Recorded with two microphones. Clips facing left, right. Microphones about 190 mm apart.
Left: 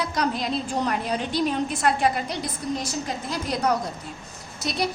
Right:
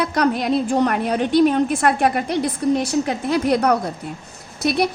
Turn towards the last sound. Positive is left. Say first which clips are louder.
# right 8 dB
turn(degrees=-60)  # may be behind; listen again after turning